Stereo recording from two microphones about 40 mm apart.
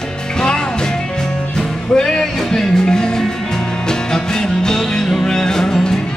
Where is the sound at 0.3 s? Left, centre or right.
Centre.